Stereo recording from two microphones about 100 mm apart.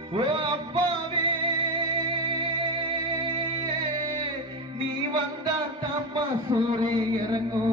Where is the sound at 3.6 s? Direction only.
55° right (ahead or behind).